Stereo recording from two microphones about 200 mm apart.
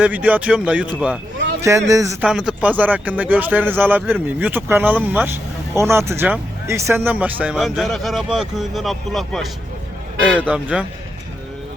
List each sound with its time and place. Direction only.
0.0 s speech: 5° right (ahead or behind)
2.2 s speech: 5° right (ahead or behind)